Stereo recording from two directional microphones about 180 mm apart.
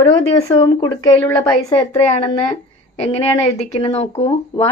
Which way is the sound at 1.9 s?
35° left (ahead or behind).